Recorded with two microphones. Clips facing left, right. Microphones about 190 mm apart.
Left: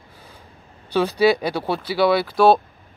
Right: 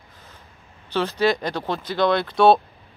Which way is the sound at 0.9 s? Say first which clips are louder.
Left 4 dB; 10° left (ahead or behind).